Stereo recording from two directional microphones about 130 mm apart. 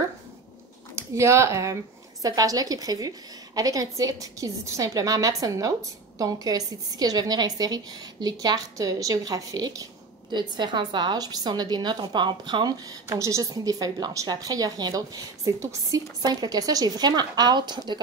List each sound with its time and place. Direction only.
0.9 s a woman's voice: 20° right (ahead or behind)
13.0 s a woman's voice: 25° right (ahead or behind)